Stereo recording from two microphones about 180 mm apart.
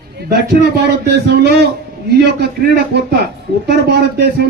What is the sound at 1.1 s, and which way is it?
Speech, 65° right (ahead or behind).